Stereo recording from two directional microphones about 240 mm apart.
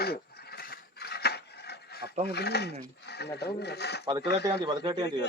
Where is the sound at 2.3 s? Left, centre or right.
Left.